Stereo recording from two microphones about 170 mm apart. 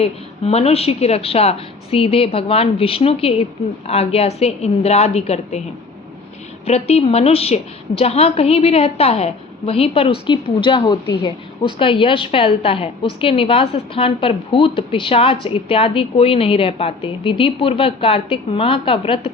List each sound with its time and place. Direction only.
0.0 s a woman's voice: 35° left (ahead or behind)
6.7 s a woman's voice: 35° left (ahead or behind)